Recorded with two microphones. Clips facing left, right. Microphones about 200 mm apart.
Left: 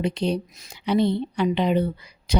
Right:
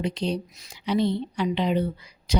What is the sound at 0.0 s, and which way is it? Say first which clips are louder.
Speech: left 3 dB; 60° left (ahead or behind).